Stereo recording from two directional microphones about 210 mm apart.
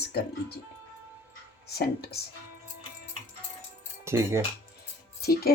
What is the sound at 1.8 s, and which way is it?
Speech, 50° left (ahead or behind).